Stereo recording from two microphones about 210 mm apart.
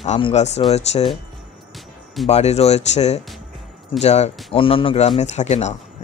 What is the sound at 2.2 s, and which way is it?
Speech, 30° left (ahead or behind).